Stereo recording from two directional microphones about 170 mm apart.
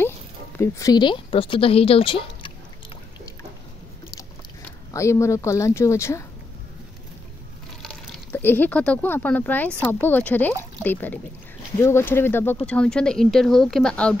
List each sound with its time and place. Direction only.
0.6 s speech: 20° left (ahead or behind)
4.9 s speech: 15° left (ahead or behind)
7.8 s speech: 10° left (ahead or behind)